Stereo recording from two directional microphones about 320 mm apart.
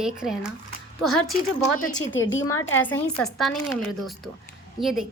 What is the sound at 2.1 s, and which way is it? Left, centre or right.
Speech, left.